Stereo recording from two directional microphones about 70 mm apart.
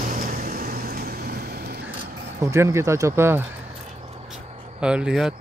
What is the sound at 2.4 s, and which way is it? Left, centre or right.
Speech, right.